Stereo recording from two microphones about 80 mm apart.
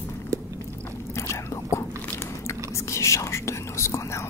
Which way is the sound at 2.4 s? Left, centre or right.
Left.